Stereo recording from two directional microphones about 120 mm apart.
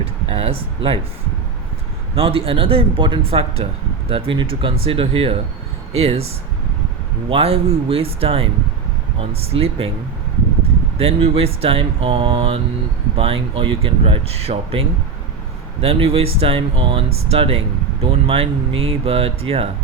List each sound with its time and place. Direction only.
0.0 s speech: 55° right (ahead or behind)
2.1 s speech: 50° right (ahead or behind)
7.3 s speech: 50° right (ahead or behind)
9.5 s speech: 55° right (ahead or behind)
10.9 s speech: 55° right (ahead or behind)